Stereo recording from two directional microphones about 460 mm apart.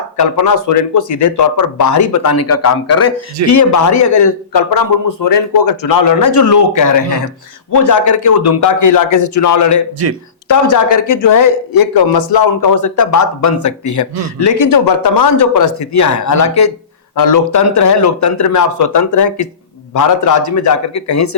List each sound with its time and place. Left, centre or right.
0.2 s speech: left